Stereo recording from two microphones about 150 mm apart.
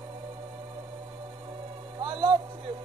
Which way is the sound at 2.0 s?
35° right (ahead or behind).